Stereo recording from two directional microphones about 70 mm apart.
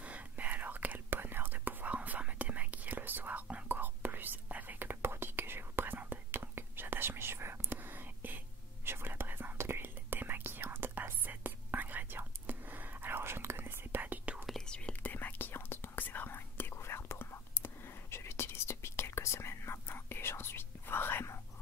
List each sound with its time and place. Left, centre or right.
0.0 s whispering: right
14.7 s whispering: centre